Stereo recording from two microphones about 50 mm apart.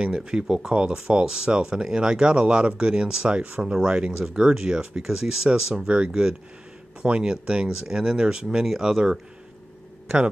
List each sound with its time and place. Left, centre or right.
0.0 s speech: centre